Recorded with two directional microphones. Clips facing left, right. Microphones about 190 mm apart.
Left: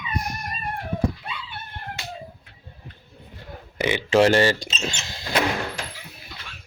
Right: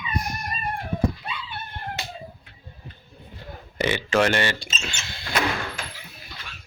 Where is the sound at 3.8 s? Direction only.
15° left (ahead or behind).